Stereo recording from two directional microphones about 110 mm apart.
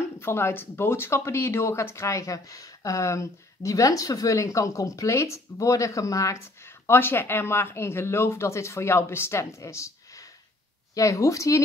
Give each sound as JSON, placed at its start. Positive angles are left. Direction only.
{"t": 0.2, "sound": "speech", "side_deg": 20}